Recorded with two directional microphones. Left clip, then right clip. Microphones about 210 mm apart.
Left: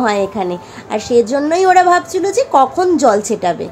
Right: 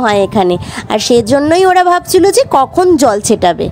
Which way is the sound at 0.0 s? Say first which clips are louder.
Right 5 dB; 50° right (ahead or behind).